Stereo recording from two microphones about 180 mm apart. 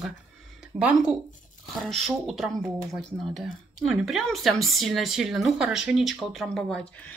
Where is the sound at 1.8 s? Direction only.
Centre (ahead or behind).